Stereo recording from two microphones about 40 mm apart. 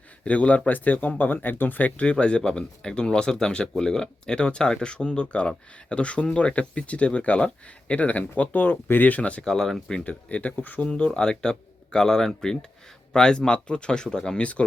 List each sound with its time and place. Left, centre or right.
0.3 s speech: left
1.2 s speech: left
2.0 s speech: left
9.4 s speech: centre
10.0 s speech: left
10.6 s speech: left
10.8 s speech: left